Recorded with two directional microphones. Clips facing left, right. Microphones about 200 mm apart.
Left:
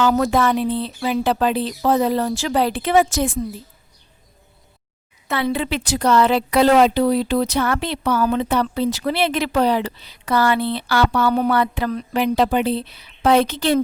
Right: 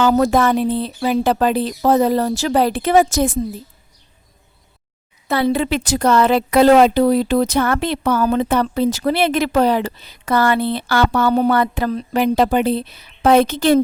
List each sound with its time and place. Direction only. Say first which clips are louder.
0.0 s a woman's voice: right 3 dB; 40° right (ahead or behind)
5.3 s a woman's voice: right 4 dB; 40° right (ahead or behind)